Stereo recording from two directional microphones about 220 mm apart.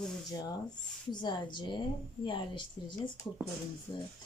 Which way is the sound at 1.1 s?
20° left (ahead or behind).